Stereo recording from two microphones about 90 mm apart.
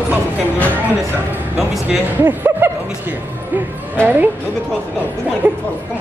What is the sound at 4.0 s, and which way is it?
Speech, 15° left (ahead or behind).